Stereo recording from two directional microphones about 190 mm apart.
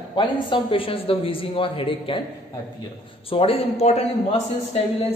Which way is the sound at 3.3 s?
30° left (ahead or behind).